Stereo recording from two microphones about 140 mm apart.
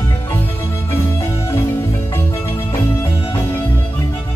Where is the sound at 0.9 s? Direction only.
20° left (ahead or behind).